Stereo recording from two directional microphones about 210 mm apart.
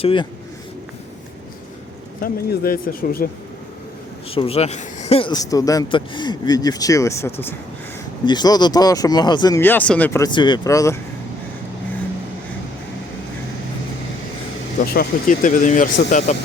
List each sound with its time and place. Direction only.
0.0 s speech: 25° left (ahead or behind)
2.2 s speech: 45° left (ahead or behind)
4.3 s speech: 25° left (ahead or behind)
14.8 s speech: 40° left (ahead or behind)